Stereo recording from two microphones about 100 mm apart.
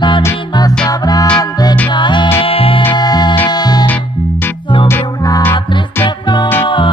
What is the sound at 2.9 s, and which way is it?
Music, 45° left (ahead or behind).